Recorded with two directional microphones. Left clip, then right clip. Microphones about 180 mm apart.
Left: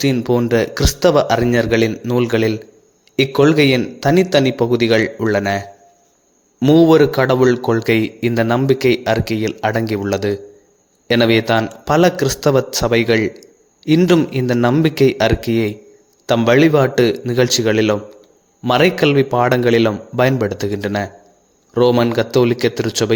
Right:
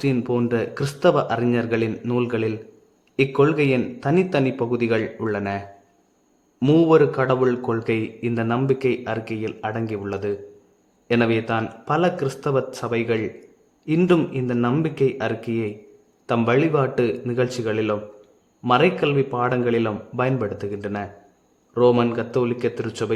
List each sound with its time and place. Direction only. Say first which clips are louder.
0.0 s speech: left 6 dB; 20° left (ahead or behind)
6.7 s speech: left 5 dB; 20° left (ahead or behind)
14.3 s speech: left 7 dB; 25° left (ahead or behind)